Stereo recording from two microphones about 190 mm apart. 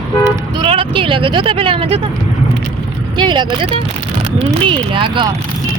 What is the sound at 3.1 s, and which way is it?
Speech, 25° right (ahead or behind).